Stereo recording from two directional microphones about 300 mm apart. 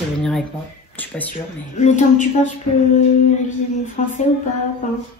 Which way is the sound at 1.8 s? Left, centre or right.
Left.